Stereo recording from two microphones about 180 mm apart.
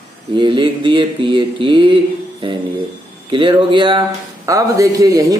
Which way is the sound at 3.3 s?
25° right (ahead or behind).